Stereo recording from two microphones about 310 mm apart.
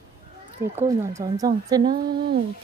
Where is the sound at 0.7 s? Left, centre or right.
Centre.